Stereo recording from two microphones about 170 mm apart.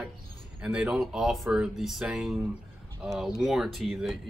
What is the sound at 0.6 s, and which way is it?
Speech, 5° right (ahead or behind).